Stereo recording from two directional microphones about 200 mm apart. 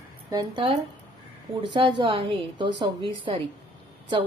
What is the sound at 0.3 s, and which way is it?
A woman's voice, 20° right (ahead or behind).